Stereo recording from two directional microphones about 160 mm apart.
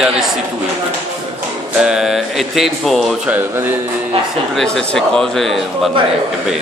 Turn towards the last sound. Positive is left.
turn(degrees=0)  # may be behind; listen again after turning